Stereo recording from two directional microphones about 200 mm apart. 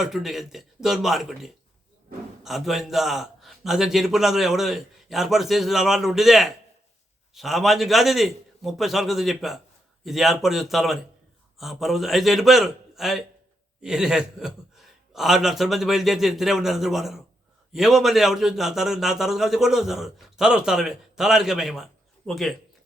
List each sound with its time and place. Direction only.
0.0 s a man's voice: centre (ahead or behind)